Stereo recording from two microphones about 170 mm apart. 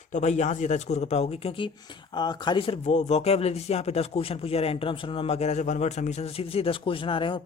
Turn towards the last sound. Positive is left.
turn(degrees=30)  # may be behind; listen again after turning